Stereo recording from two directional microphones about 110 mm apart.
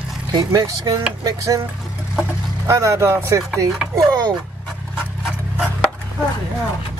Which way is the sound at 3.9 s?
35° right (ahead or behind).